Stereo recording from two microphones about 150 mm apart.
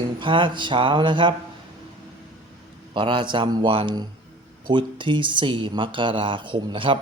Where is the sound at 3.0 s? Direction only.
30° right (ahead or behind).